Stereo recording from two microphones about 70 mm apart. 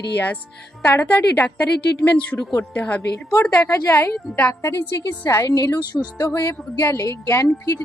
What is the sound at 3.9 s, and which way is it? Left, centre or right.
A woman's voice, left.